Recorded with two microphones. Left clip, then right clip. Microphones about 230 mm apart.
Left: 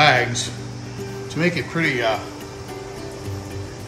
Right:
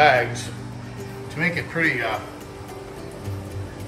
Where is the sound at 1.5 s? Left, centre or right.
Centre.